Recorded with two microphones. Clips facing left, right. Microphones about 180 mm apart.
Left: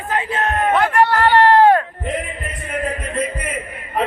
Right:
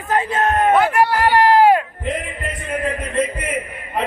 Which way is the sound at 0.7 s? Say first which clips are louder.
Even; 10° right (ahead or behind).